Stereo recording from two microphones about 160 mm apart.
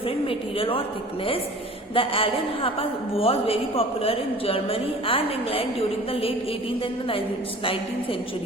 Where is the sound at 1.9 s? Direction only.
35° left (ahead or behind).